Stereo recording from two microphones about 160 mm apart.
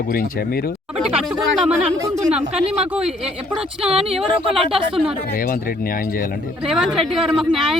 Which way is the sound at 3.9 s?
40° right (ahead or behind).